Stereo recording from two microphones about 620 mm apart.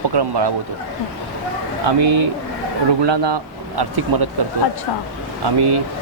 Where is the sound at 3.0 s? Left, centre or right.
Right.